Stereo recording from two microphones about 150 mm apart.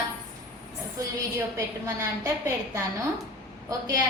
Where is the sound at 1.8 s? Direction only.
20° right (ahead or behind).